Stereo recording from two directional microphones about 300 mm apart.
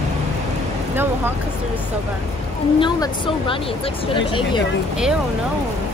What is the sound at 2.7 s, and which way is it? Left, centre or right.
Speech, centre.